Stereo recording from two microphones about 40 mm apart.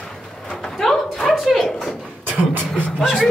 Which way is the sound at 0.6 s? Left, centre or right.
Centre.